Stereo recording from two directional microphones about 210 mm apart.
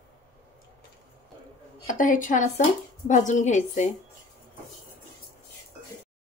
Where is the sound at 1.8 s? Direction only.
40° left (ahead or behind).